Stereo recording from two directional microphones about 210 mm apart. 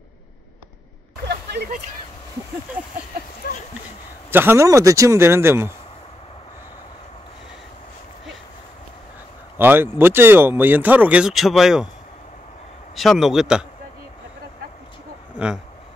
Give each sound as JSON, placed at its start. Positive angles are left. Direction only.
{"t": 1.2, "sound": "a sound", "side_deg": -50}
{"t": 4.3, "sound": "speech", "side_deg": -10}
{"t": 9.6, "sound": "speech", "side_deg": -10}
{"t": 12.9, "sound": "speech", "side_deg": 0}
{"t": 15.3, "sound": "speech", "side_deg": -5}